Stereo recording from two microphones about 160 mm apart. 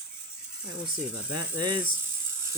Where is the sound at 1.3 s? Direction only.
25° right (ahead or behind).